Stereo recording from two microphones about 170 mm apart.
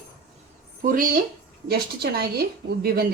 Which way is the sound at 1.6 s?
65° right (ahead or behind).